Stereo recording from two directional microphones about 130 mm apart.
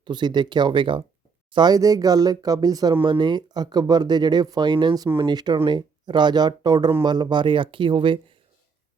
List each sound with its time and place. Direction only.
0.0 s speech: 35° right (ahead or behind)